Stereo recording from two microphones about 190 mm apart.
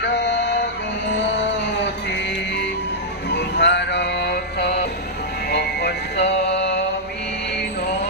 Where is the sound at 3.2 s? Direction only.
65° left (ahead or behind).